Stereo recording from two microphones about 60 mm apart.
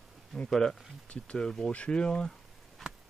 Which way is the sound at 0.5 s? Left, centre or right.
Centre.